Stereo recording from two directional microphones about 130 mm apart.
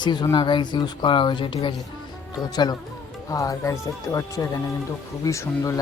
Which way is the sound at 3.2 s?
25° left (ahead or behind).